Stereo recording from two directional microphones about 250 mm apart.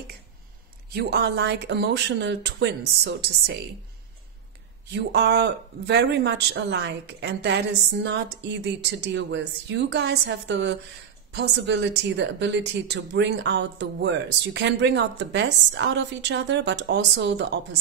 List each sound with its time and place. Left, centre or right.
0.9 s speech: right
4.9 s speech: right